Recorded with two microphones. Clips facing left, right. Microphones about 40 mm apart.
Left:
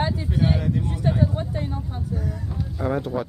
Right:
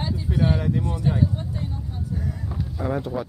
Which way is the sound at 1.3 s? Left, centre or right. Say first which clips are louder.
Left 3 dB; left.